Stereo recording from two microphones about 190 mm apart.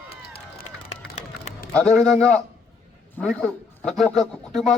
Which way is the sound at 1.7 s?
5° left (ahead or behind).